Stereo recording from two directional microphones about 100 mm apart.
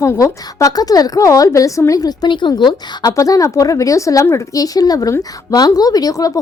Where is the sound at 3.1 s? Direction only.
35° left (ahead or behind).